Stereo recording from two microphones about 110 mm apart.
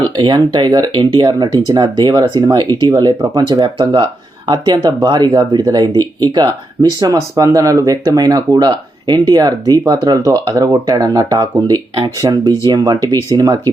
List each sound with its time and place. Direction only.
0.2 s speech: 40° right (ahead or behind)